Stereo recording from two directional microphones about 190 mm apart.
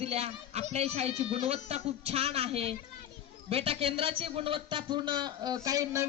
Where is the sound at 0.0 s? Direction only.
30° right (ahead or behind).